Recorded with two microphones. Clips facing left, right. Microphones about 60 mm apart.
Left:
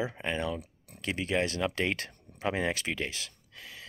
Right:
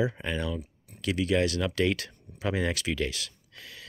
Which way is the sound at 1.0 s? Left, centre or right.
Left.